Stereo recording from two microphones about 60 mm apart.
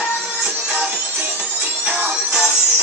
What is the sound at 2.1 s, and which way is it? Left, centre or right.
Music, centre.